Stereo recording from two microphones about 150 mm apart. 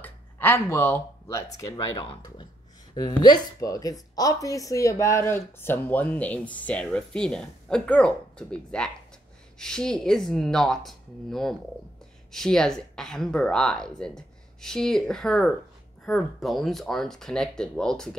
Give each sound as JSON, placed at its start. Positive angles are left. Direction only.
{"t": 0.0, "sound": "speech", "side_deg": 15}